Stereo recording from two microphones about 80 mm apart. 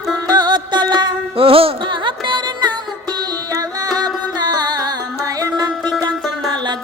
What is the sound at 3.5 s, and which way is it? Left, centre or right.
Music, right.